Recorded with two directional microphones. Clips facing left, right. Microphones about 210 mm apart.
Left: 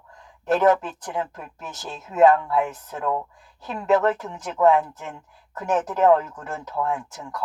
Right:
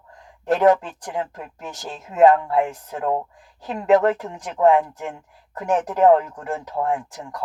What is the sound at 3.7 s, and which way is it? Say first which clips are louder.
Speech: right 3 dB; 15° right (ahead or behind).